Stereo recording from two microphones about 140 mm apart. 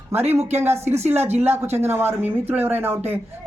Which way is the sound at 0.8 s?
50° right (ahead or behind).